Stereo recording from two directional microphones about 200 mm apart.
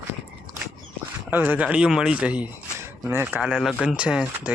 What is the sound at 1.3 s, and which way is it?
Speech, 10° right (ahead or behind).